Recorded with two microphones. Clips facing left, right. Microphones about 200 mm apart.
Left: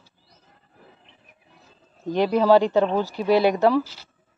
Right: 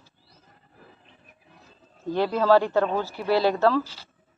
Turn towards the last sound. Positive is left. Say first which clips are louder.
# left 3 dB
turn(degrees=15)  # may be behind; listen again after turning